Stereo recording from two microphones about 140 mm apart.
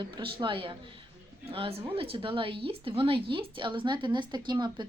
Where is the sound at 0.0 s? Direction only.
35° right (ahead or behind).